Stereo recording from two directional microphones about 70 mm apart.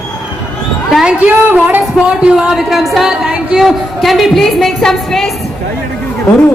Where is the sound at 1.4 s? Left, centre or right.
Right.